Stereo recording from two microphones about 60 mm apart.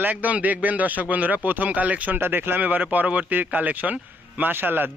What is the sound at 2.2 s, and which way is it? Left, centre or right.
A man's voice, right.